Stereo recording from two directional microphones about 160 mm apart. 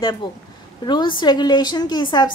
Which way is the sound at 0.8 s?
30° left (ahead or behind).